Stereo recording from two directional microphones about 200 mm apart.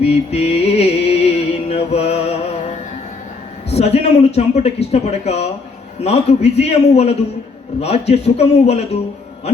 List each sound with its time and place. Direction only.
0.0 s music: 30° left (ahead or behind)
3.7 s speech: 30° left (ahead or behind)